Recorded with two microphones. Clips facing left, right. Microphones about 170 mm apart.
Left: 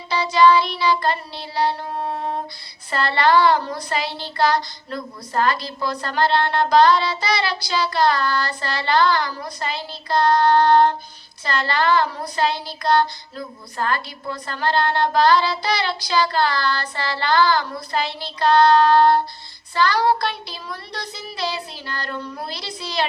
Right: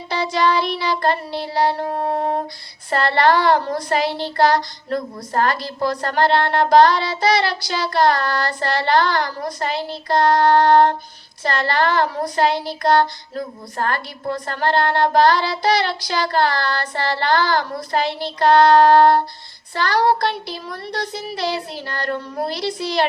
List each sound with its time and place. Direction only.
0.1 s child singing: 55° right (ahead or behind)
6.7 s child singing: 50° right (ahead or behind)
9.7 s child singing: 65° right (ahead or behind)
11.4 s speech: 60° right (ahead or behind)
12.4 s child singing: 65° right (ahead or behind)
13.4 s speech: 55° right (ahead or behind)
19.7 s child singing: 60° right (ahead or behind); by 20.3 s 45° right (ahead or behind)
21.1 s speech: 65° right (ahead or behind)